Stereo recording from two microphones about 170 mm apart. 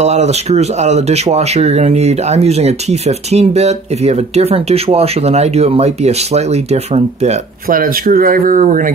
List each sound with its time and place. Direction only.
0.0 s speech: 40° right (ahead or behind)
7.6 s speech: 55° right (ahead or behind)